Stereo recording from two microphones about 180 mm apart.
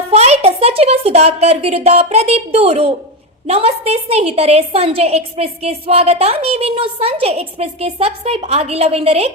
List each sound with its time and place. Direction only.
0.1 s a woman's voice: 35° right (ahead or behind)